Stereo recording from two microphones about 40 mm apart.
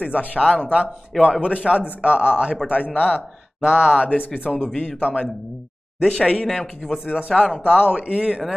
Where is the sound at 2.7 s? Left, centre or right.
Left.